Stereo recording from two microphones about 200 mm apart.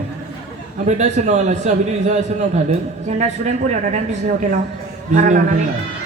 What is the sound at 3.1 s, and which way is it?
Speech, 35° right (ahead or behind).